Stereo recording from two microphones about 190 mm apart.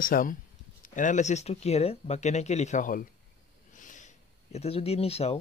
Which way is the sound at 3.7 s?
40° left (ahead or behind).